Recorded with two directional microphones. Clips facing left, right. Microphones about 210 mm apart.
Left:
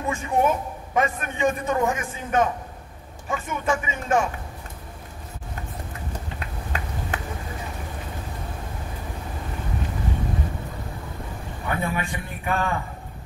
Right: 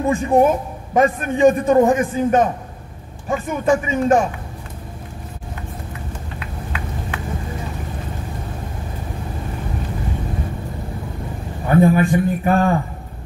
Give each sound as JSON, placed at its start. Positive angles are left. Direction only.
{"t": 0.0, "sound": "a man's voice", "side_deg": -35}
{"t": 6.4, "sound": "a sound", "side_deg": 40}
{"t": 11.6, "sound": "a man's voice", "side_deg": -40}